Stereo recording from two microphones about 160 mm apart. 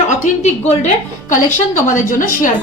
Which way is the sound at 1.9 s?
55° left (ahead or behind).